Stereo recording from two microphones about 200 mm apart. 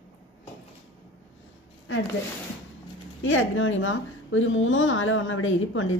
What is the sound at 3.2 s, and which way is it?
A woman's voice, 75° left (ahead or behind).